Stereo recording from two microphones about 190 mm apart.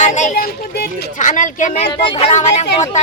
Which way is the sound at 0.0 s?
40° left (ahead or behind).